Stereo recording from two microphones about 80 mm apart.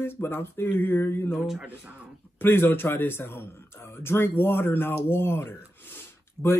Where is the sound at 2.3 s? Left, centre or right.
Left.